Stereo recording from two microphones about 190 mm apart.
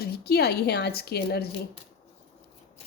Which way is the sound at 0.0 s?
55° left (ahead or behind).